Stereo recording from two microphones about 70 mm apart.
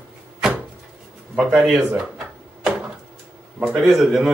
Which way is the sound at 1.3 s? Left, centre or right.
Centre.